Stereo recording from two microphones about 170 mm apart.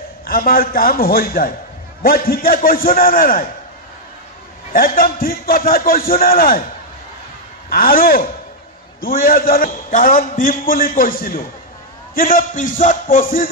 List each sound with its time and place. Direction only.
0.3 s a man's voice: 60° left (ahead or behind)
4.7 s a man's voice: 55° left (ahead or behind)
7.7 s a man's voice: 60° left (ahead or behind)
12.2 s music: 55° left (ahead or behind)